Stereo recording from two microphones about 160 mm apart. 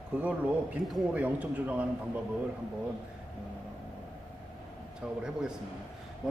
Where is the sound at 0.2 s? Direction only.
10° right (ahead or behind).